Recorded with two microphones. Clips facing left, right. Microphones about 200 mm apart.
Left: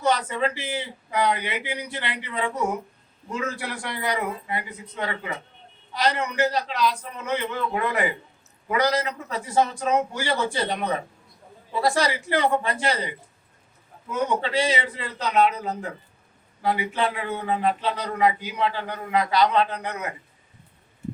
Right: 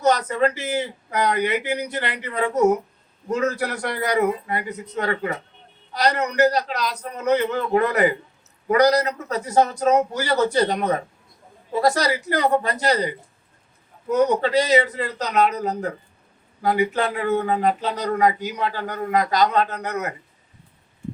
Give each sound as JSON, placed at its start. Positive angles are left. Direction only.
{"t": 0.0, "sound": "a man's voice", "side_deg": -40}